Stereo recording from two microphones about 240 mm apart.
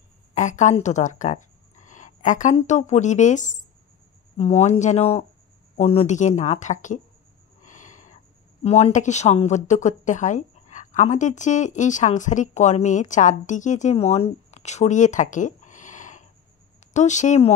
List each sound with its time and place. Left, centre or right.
0.3 s speech: left
7.6 s a sound: left
8.6 s speech: left